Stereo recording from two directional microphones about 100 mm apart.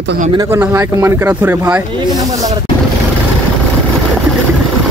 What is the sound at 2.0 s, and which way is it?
Speech, 40° right (ahead or behind).